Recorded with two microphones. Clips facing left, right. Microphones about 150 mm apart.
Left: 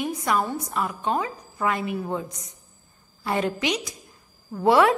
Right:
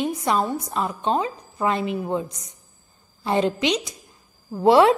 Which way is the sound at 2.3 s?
20° left (ahead or behind).